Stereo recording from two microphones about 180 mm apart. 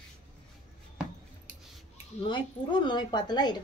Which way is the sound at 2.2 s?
25° left (ahead or behind).